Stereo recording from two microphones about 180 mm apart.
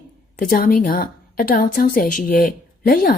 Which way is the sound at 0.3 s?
50° left (ahead or behind).